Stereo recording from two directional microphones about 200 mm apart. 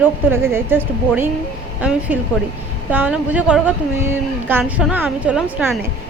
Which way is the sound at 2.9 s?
10° right (ahead or behind).